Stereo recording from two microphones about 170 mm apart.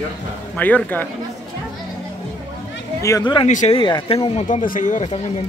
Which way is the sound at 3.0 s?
20° left (ahead or behind).